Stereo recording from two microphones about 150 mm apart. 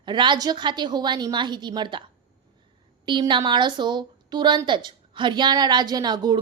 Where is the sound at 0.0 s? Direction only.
30° right (ahead or behind).